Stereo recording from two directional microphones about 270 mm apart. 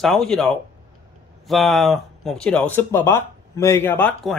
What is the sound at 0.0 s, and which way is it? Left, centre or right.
Speech, centre.